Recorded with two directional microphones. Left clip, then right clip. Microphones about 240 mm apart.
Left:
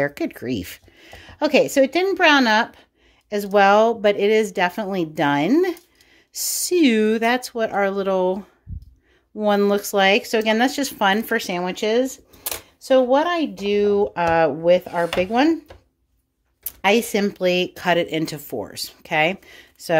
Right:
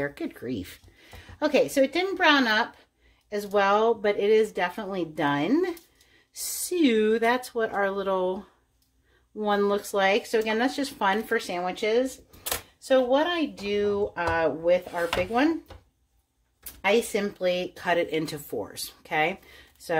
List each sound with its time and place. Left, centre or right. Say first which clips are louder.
0.0 s speech: left 8 dB; left
16.8 s speech: left 5 dB; left